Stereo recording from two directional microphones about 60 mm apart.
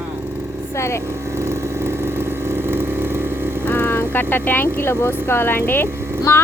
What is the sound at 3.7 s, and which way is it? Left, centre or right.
Speech, left.